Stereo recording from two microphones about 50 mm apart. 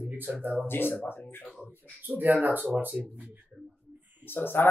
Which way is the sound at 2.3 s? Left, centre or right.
Right.